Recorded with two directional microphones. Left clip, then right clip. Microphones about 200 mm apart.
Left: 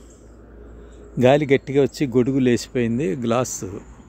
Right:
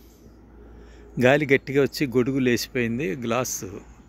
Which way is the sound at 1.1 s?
5° left (ahead or behind).